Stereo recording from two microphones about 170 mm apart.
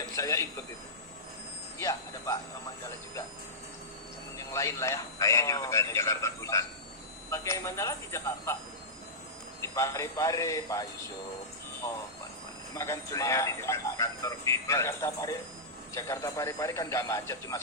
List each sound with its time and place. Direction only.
0.0 s a sound: 20° left (ahead or behind)
1.8 s speech: 20° left (ahead or behind)
4.4 s a man's voice: 15° left (ahead or behind)
9.7 s a man's voice: 15° left (ahead or behind)
12.7 s a man's voice: 20° left (ahead or behind)